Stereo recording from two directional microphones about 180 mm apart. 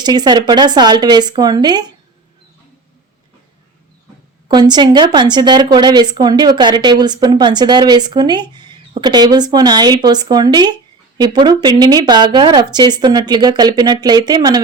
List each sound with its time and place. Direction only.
0.0 s a woman's voice: 25° right (ahead or behind)
4.4 s a woman's voice: 25° right (ahead or behind)